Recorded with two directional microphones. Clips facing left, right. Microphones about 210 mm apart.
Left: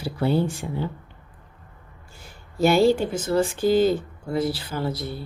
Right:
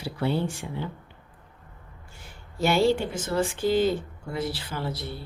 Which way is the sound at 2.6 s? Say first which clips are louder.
Left 4 dB; 40° left (ahead or behind).